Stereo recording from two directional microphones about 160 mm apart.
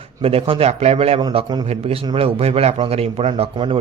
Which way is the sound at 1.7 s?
40° right (ahead or behind).